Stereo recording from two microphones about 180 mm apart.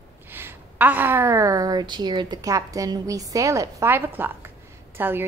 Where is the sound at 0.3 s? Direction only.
10° right (ahead or behind).